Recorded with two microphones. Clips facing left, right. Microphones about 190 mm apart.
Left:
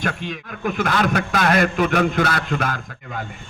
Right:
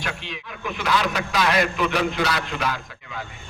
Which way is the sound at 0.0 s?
50° left (ahead or behind).